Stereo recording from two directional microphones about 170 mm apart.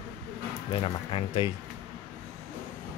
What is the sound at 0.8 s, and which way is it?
Speech, 30° left (ahead or behind).